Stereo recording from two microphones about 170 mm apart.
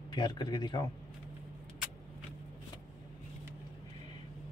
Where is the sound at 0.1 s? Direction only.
25° left (ahead or behind).